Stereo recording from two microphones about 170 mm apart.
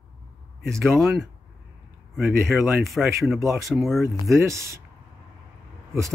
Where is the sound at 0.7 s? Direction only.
Centre (ahead or behind).